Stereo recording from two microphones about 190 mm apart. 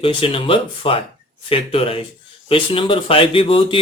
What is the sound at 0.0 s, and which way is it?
Speech, 30° left (ahead or behind).